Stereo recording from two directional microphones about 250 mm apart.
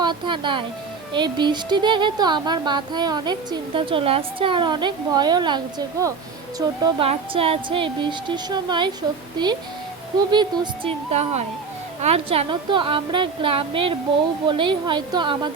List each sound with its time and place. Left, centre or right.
0.0 s a woman's voice: centre
10.3 s a woman's voice: centre